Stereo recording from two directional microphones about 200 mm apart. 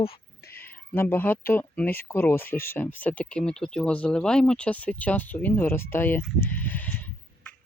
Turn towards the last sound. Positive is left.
turn(degrees=10)  # may be behind; listen again after turning